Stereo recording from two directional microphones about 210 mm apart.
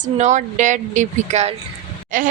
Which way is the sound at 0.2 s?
35° right (ahead or behind).